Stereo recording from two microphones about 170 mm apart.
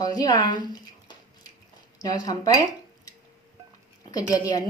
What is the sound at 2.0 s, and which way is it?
Speech, 20° left (ahead or behind).